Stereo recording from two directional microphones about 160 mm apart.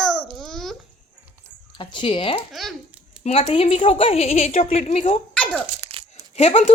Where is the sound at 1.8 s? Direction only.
30° left (ahead or behind).